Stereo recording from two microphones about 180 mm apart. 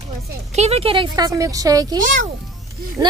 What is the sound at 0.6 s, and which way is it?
A woman's voice, 35° right (ahead or behind).